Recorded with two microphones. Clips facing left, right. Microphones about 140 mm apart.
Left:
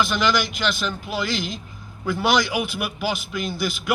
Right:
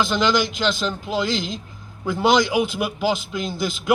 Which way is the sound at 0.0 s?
25° right (ahead or behind).